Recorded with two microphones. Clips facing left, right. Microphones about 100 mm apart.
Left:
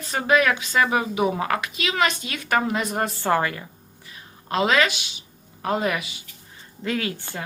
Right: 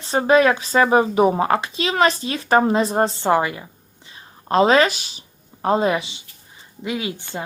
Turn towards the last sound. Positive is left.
turn(degrees=-20)  # may be behind; listen again after turning